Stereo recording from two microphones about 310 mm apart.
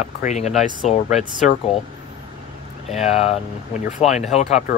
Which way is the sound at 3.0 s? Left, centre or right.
Left.